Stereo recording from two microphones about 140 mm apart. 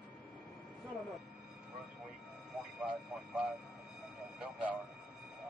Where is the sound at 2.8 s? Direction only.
10° right (ahead or behind).